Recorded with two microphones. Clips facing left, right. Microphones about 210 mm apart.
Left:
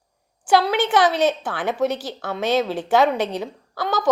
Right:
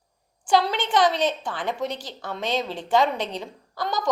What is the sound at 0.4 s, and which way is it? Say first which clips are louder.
A woman's voice: left 4 dB; 5° left (ahead or behind).